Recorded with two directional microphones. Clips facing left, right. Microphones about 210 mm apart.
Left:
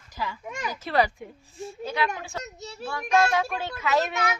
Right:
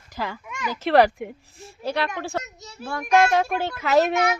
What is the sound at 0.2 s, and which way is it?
Speech, 65° right (ahead or behind).